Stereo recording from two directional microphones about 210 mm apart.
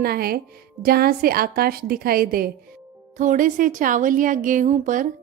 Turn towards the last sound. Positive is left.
turn(degrees=-35)  # may be behind; listen again after turning